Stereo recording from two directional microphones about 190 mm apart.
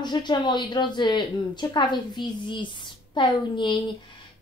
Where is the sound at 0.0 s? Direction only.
25° left (ahead or behind).